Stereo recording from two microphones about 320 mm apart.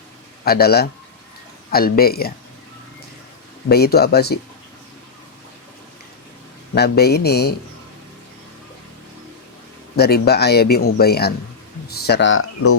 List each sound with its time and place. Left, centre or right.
0.4 s speech: left
3.7 s speech: left
6.7 s speech: left
10.0 s speech: left